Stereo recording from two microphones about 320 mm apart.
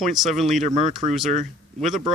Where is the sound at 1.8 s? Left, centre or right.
Centre.